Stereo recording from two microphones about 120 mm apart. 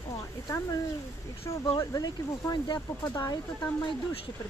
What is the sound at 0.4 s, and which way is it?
Speech, 30° left (ahead or behind).